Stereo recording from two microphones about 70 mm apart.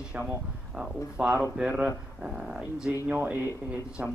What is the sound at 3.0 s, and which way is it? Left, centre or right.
Speech, right.